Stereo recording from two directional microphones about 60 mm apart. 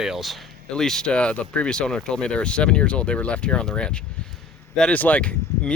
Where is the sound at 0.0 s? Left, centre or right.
Centre.